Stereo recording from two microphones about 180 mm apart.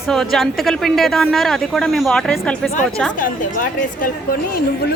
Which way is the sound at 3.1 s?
50° left (ahead or behind).